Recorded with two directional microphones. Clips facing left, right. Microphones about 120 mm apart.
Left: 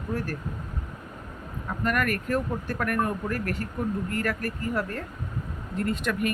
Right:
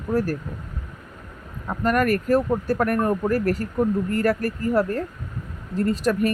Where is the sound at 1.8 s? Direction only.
35° right (ahead or behind).